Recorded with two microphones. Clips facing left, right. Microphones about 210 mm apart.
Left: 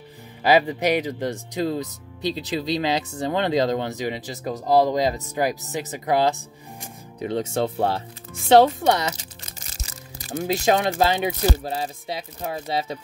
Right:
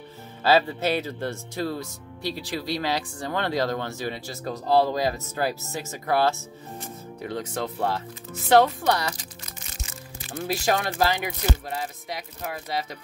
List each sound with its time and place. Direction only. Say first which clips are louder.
0.4 s speech: left 2 dB; 15° left (ahead or behind)
9.6 s music: even; 40° left (ahead or behind)
10.4 s speech: left 5 dB; 20° left (ahead or behind)